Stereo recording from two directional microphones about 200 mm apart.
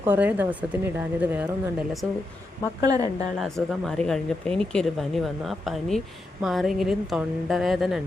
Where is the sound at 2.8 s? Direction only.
20° right (ahead or behind).